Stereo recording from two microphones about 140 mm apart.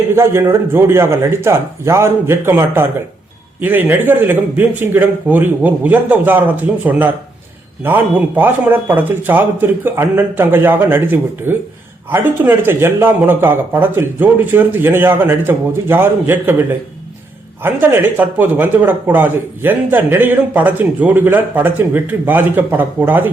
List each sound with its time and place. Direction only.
0.2 s speech: 20° right (ahead or behind)